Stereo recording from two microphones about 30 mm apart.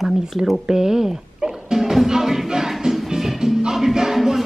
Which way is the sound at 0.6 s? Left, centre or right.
Centre.